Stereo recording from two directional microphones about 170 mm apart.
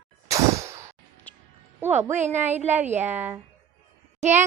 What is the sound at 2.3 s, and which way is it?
A woman's voice, 10° right (ahead or behind).